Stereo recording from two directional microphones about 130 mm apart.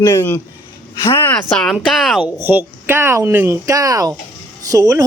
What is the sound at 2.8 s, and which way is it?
Speech, 15° right (ahead or behind).